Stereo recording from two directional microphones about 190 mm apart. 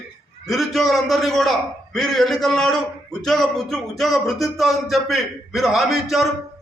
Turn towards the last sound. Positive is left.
turn(degrees=0)  # may be behind; listen again after turning